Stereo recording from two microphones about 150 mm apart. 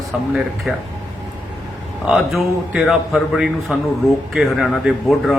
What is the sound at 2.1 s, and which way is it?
A man's voice, centre (ahead or behind).